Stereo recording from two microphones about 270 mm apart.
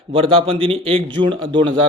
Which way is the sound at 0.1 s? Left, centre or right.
Centre.